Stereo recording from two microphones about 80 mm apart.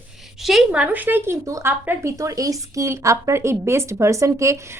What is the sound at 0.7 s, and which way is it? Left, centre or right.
A woman's voice, centre.